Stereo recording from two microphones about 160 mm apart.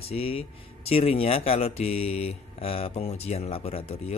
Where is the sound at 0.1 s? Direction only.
35° left (ahead or behind).